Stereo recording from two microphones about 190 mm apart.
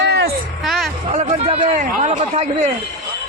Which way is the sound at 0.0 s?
60° right (ahead or behind).